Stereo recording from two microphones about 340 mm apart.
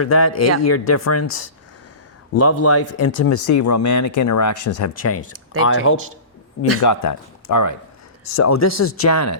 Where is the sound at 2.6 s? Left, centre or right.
Left.